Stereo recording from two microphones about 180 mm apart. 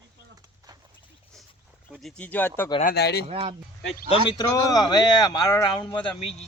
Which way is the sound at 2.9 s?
65° left (ahead or behind).